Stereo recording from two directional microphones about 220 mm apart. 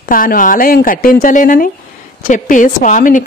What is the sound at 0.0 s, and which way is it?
A woman's voice, 40° left (ahead or behind).